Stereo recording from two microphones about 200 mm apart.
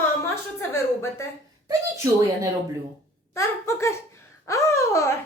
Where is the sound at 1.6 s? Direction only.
15° right (ahead or behind).